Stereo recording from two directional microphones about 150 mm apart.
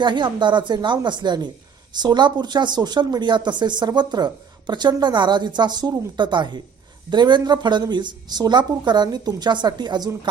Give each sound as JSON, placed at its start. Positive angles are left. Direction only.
{"t": 0.0, "sound": "a woman's voice", "side_deg": -30}